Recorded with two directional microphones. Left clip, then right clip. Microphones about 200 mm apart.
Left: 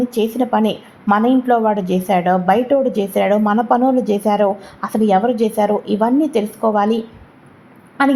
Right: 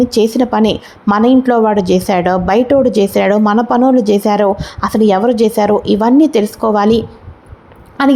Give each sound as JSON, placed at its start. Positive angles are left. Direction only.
{"t": 0.0, "sound": "a woman's voice", "side_deg": -30}